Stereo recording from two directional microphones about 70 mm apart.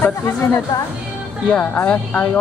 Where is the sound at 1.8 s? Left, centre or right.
Left.